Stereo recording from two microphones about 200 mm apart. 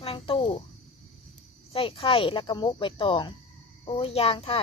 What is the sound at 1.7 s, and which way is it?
Speech, 30° left (ahead or behind).